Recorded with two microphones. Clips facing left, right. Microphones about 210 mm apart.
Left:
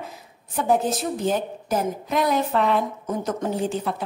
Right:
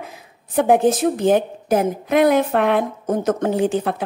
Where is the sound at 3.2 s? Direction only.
70° right (ahead or behind).